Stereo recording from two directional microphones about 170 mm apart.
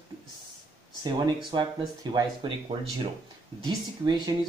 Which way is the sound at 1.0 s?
25° right (ahead or behind).